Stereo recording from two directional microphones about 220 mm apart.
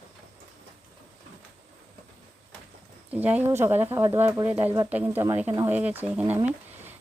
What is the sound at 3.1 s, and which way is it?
Speech, 5° right (ahead or behind).